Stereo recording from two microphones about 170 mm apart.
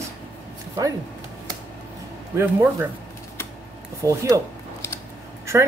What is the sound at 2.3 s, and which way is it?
Speech, 10° right (ahead or behind).